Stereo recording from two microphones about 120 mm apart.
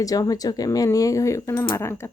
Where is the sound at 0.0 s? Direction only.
30° left (ahead or behind).